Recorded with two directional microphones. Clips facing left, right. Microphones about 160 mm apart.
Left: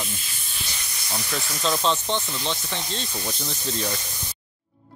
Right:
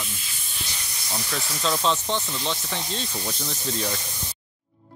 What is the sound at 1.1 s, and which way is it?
Speech, centre (ahead or behind).